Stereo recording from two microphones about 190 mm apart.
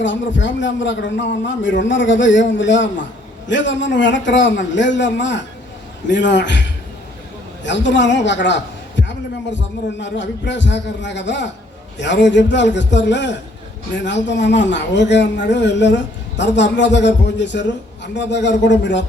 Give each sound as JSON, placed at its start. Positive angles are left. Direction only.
{"t": 0.0, "sound": "a man's voice", "side_deg": 75}